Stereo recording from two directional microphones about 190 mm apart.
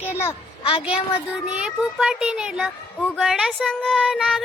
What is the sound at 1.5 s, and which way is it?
Speech, 5° right (ahead or behind).